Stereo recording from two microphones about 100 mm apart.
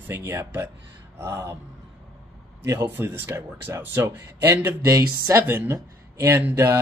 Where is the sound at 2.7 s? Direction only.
20° right (ahead or behind).